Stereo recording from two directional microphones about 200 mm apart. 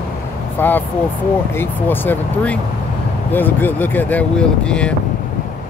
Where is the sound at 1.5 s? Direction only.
10° left (ahead or behind).